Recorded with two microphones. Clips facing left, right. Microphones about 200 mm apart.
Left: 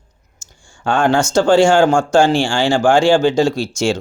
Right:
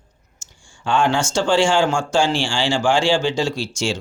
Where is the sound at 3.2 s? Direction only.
40° left (ahead or behind).